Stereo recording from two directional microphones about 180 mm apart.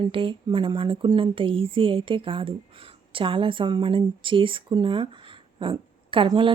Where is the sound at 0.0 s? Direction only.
30° right (ahead or behind).